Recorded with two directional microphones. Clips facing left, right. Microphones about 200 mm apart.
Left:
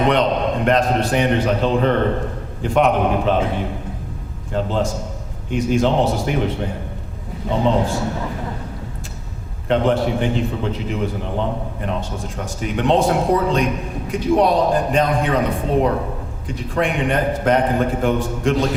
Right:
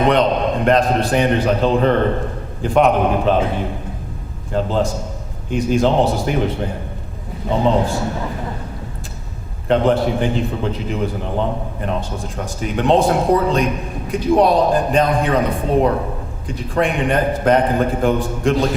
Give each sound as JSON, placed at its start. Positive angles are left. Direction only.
{"t": 0.1, "sound": "a man's voice", "side_deg": -35}
{"t": 4.5, "sound": "a man's voice", "side_deg": -35}
{"t": 9.6, "sound": "a man's voice", "side_deg": -35}